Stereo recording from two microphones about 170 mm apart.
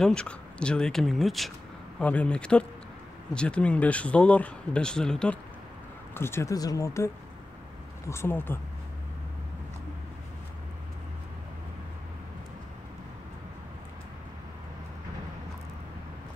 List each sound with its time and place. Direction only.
0.0 s speech: 5° left (ahead or behind)
8.1 s speech: 15° left (ahead or behind)